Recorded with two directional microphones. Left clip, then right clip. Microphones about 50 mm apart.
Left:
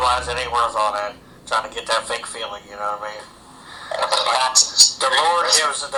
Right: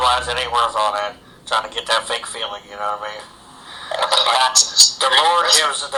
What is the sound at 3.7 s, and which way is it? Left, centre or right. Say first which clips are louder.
Speech: right 3 dB; right.